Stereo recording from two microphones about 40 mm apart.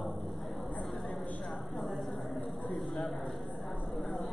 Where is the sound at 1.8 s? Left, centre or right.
Centre.